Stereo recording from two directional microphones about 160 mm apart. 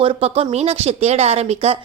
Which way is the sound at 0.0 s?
35° right (ahead or behind).